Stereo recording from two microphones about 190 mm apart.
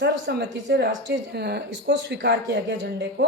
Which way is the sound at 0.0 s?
60° right (ahead or behind).